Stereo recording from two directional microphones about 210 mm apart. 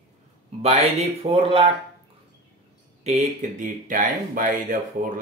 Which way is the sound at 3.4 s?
35° right (ahead or behind).